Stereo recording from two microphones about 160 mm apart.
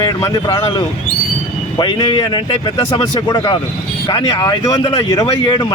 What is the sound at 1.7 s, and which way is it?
Speech, 30° left (ahead or behind).